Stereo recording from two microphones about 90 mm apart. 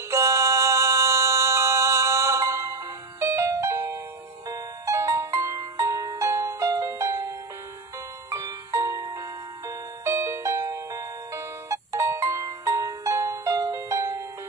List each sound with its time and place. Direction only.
0.1 s music: 35° right (ahead or behind)